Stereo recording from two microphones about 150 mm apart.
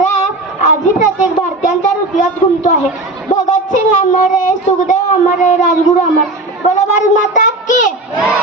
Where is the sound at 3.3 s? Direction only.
55° left (ahead or behind).